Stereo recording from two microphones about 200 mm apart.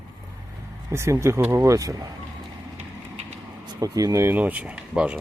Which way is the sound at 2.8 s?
35° right (ahead or behind).